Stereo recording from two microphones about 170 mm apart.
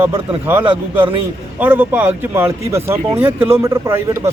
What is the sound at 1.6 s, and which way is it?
Speech, 10° right (ahead or behind).